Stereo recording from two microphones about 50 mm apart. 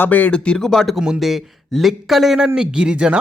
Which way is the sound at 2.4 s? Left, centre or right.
Centre.